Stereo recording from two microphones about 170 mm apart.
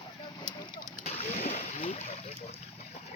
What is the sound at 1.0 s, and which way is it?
Boat, 40° left (ahead or behind).